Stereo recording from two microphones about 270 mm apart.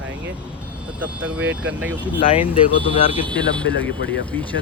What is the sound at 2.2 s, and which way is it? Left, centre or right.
Speech, left.